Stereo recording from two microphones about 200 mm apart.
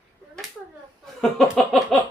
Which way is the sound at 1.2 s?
Centre (ahead or behind).